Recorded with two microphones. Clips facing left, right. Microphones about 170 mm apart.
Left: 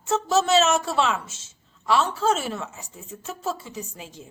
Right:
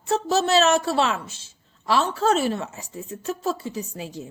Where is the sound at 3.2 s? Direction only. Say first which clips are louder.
Right 4 dB; 40° right (ahead or behind).